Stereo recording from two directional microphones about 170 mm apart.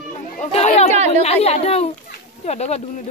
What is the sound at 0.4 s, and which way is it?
Chatter, 40° left (ahead or behind).